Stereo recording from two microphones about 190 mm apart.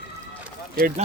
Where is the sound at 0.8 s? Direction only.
50° right (ahead or behind).